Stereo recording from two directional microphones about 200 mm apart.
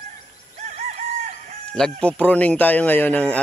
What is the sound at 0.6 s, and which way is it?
Fowl, 35° right (ahead or behind).